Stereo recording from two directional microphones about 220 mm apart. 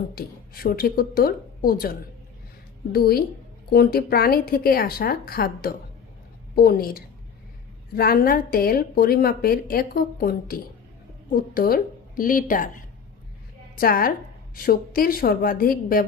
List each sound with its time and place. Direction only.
0.1 s a woman's voice: 45° left (ahead or behind)